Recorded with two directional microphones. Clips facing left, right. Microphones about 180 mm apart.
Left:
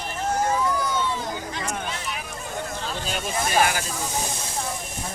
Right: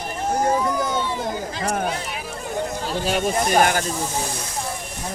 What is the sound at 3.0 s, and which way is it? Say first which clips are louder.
Speech: right 8 dB; 60° right (ahead or behind).